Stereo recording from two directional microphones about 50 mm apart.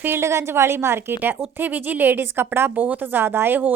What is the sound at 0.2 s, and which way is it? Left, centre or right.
A woman's voice, right.